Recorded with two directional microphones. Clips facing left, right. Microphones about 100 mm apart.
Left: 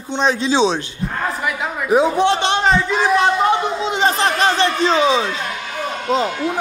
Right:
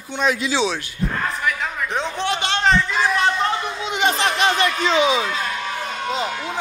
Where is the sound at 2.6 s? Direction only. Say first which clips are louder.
Left 2 dB; 10° left (ahead or behind); by 5.3 s 35° left (ahead or behind).